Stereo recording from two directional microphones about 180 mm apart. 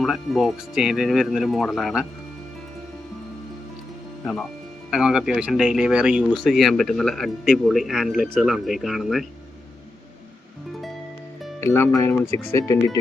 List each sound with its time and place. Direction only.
0.0 s speech: centre (ahead or behind)
4.9 s speech: 5° right (ahead or behind)
11.6 s speech: 15° left (ahead or behind)